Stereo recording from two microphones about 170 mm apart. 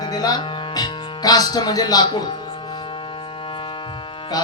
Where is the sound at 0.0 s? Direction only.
25° left (ahead or behind).